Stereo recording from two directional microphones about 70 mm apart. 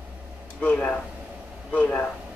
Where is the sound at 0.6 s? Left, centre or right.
Centre.